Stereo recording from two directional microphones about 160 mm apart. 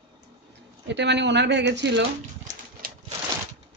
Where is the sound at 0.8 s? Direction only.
90° right.